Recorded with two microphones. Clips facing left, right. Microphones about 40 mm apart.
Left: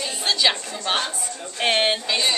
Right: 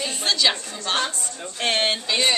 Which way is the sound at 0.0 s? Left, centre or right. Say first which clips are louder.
Even; centre.